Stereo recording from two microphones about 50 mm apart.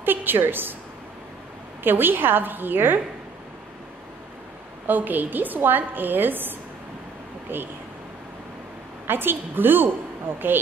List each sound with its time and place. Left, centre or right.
0.0 s a woman's voice: right
1.8 s a woman's voice: right
4.8 s a woman's voice: right
7.5 s a woman's voice: right
9.0 s a woman's voice: right